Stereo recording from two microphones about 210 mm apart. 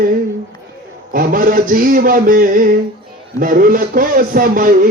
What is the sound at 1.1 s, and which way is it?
Mantra, 40° right (ahead or behind).